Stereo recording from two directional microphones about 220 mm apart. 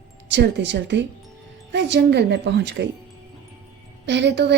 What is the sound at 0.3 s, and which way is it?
A woman's voice, 55° right (ahead or behind).